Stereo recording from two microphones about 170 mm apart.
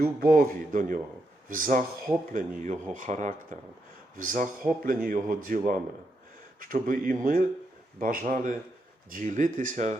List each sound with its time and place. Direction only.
0.0 s a man's voice: 65° right (ahead or behind); by 10.0 s 45° right (ahead or behind)